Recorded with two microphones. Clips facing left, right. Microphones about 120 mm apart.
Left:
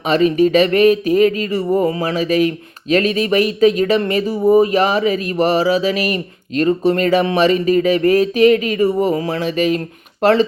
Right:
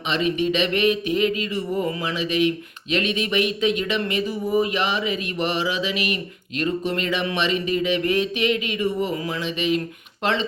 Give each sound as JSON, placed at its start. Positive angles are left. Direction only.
{"t": 0.1, "sound": "speech", "side_deg": 40}